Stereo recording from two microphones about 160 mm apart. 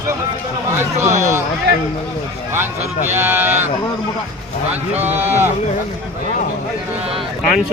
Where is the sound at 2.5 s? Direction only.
15° right (ahead or behind).